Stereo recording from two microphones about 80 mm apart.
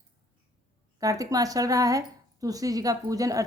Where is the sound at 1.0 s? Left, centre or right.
Right.